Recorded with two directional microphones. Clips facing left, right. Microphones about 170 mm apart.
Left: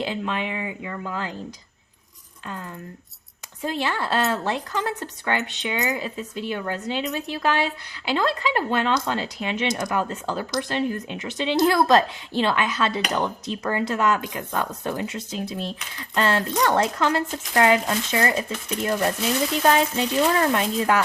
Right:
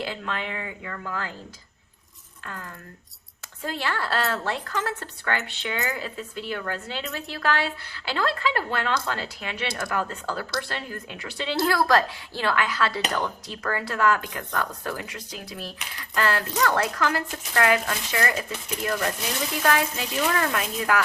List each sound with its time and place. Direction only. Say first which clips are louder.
0.0 s speech: left 4 dB; 20° left (ahead or behind)
3.6 s speech: left 3 dB; 20° left (ahead or behind)